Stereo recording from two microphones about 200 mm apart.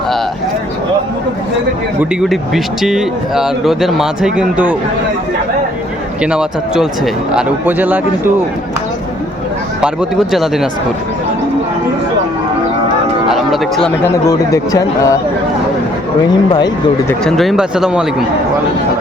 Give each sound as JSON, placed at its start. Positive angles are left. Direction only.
{"t": 2.0, "sound": "speech", "side_deg": 0}
{"t": 6.2, "sound": "speech", "side_deg": -5}
{"t": 9.8, "sound": "speech", "side_deg": -5}
{"t": 13.3, "sound": "music", "side_deg": 0}
{"t": 14.3, "sound": "speech", "side_deg": 15}
{"t": 16.5, "sound": "speech", "side_deg": 20}
{"t": 17.2, "sound": "speech", "side_deg": 0}